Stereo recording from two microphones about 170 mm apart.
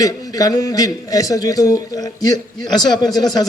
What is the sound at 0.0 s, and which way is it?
A man's voice, 20° left (ahead or behind).